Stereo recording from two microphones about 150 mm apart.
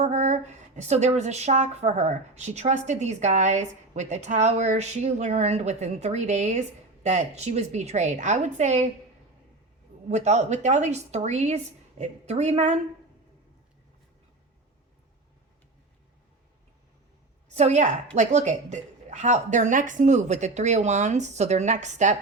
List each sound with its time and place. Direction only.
0.0 s speech: 50° right (ahead or behind)
10.1 s speech: 50° right (ahead or behind)
17.5 s speech: 50° right (ahead or behind)